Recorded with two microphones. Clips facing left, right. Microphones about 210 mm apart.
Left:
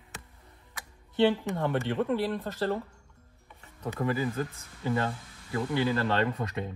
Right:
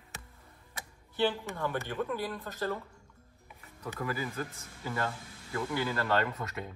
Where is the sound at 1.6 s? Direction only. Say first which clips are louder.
Left 5 dB; 25° left (ahead or behind).